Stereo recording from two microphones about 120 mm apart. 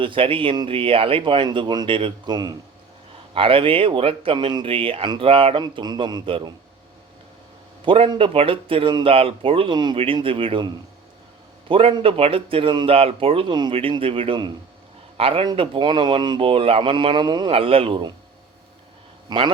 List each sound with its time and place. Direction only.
0.0 s speech: 45° right (ahead or behind)
3.3 s speech: 50° right (ahead or behind)
5.6 s a man's voice: 35° right (ahead or behind)
7.9 s speech: 45° right (ahead or behind)
11.7 s speech: 50° right (ahead or behind)
17.5 s speech: 50° right (ahead or behind)
19.3 s a man's voice: 35° right (ahead or behind)